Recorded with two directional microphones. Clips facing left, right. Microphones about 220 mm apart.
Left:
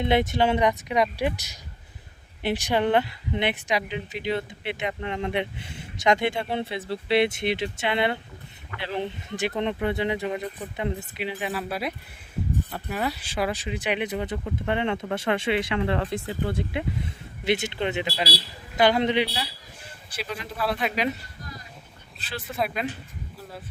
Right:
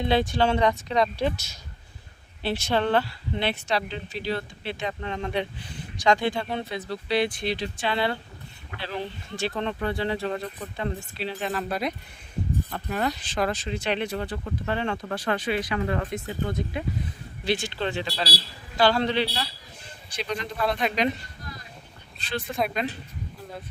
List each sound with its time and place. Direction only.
0.0 s speech: 20° left (ahead or behind)
2.4 s speech: 15° left (ahead or behind)
22.2 s speech: 5° left (ahead or behind)